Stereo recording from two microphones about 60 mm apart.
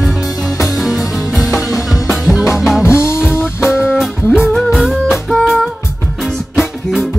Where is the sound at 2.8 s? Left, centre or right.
Left.